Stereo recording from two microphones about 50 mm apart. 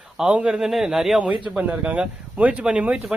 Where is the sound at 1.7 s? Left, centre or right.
Right.